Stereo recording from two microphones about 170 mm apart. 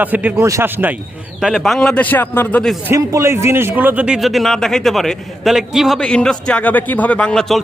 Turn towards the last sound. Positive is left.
turn(degrees=0)  # may be behind; listen again after turning